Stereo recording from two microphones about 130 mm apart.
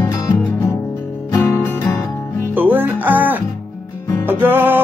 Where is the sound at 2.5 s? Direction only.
15° right (ahead or behind).